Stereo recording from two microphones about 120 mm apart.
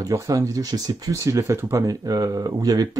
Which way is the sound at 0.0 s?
25° right (ahead or behind).